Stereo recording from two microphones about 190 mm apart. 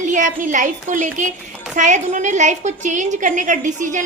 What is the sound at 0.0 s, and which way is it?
A woman's voice, 40° right (ahead or behind).